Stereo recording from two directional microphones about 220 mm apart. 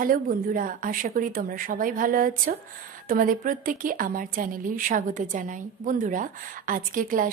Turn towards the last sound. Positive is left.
turn(degrees=-40)  # may be behind; listen again after turning